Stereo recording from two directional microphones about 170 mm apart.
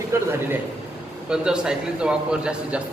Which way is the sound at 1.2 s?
5° right (ahead or behind).